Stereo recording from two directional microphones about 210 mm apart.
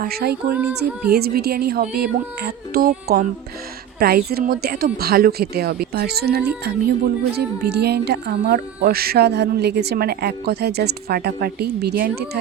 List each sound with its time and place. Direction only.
0.0 s speech: 45° right (ahead or behind)